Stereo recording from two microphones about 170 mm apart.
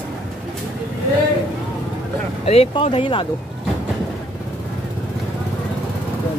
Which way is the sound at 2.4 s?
35° left (ahead or behind).